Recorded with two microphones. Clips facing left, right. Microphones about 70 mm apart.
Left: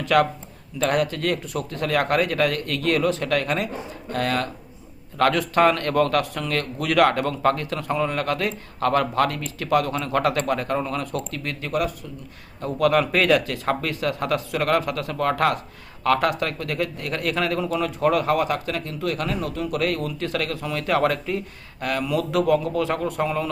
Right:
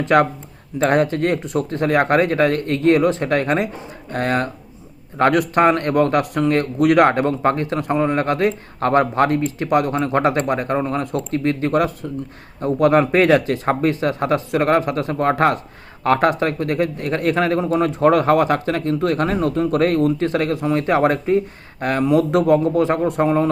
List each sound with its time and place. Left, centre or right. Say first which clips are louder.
0.0 s speech: right 4 dB; right